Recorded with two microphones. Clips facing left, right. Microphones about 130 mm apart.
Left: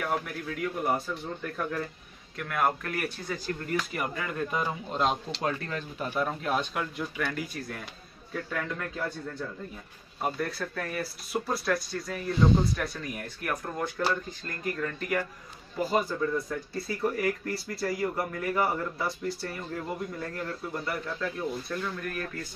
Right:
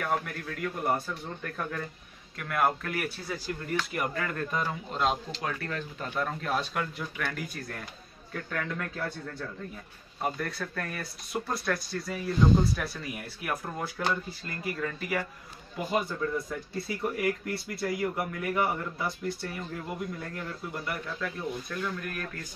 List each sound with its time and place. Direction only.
0.0 s speech: 5° left (ahead or behind)
5.4 s speech: 25° left (ahead or behind)
6.1 s a man's voice: 5° left (ahead or behind)